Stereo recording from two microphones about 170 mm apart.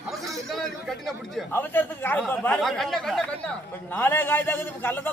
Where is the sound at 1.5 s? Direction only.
10° left (ahead or behind).